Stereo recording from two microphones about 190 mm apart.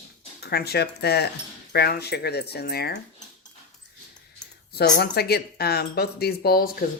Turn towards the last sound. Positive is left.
turn(degrees=55)  # may be behind; listen again after turning